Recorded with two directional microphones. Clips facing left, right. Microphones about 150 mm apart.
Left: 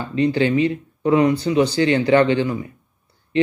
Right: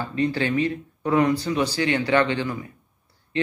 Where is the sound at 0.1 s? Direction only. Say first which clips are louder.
Left 6 dB; 25° left (ahead or behind).